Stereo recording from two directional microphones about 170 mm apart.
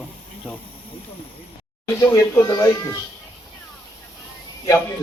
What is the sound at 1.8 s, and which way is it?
Speech, 15° left (ahead or behind).